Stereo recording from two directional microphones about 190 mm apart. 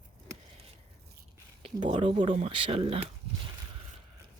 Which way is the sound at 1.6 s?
25° right (ahead or behind).